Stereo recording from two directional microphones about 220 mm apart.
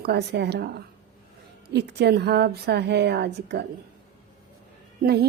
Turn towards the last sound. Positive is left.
turn(degrees=-45)  # may be behind; listen again after turning